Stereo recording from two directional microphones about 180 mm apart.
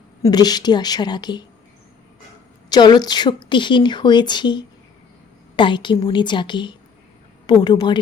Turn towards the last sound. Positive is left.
turn(degrees=25)  # may be behind; listen again after turning